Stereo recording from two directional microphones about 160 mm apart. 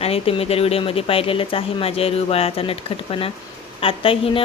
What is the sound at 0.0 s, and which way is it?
A woman's voice, 35° left (ahead or behind).